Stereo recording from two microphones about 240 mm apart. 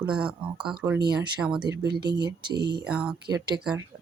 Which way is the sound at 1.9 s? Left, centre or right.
Centre.